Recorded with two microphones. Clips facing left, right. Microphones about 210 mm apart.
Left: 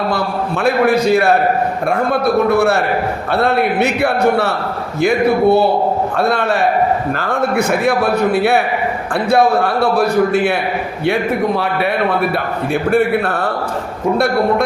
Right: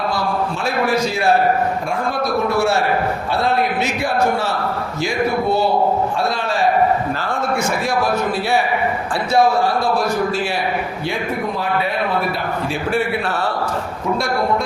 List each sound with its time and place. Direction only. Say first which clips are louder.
0.1 s a man's voice: left 2 dB; 60° left (ahead or behind)
12.9 s a man's voice: left 6 dB; 55° left (ahead or behind)